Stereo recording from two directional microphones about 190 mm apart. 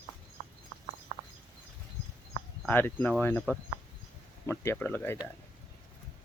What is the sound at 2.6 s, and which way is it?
Speech, 10° left (ahead or behind).